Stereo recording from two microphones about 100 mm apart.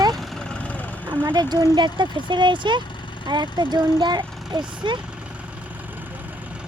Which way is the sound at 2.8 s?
50° left (ahead or behind).